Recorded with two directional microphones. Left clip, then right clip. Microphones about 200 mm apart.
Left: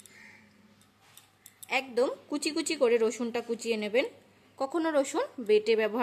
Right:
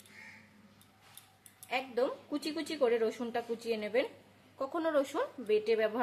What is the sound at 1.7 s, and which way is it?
A woman's voice, 50° left (ahead or behind).